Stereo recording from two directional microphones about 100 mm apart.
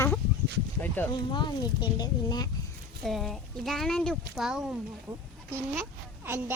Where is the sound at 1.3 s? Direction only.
50° left (ahead or behind).